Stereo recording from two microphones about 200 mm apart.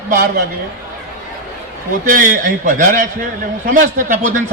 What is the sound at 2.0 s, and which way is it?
A man's voice, 45° right (ahead or behind).